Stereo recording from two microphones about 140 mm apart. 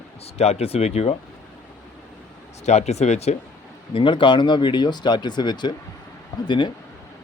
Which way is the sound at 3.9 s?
35° left (ahead or behind).